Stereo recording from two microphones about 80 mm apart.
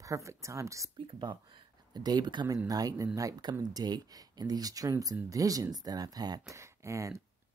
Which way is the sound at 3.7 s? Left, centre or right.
Right.